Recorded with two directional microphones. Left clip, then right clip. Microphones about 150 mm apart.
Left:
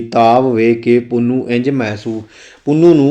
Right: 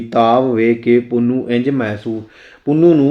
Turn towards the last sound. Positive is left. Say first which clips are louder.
# left 2 dB
turn(degrees=35)  # may be behind; listen again after turning